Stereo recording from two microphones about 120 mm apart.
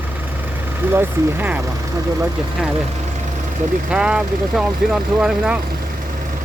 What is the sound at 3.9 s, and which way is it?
Speech, 10° right (ahead or behind).